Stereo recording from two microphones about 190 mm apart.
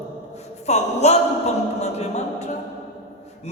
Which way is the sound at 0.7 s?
35° left (ahead or behind).